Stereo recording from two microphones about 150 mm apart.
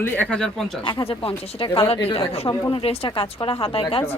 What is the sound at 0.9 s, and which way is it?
A woman's voice, 35° left (ahead or behind).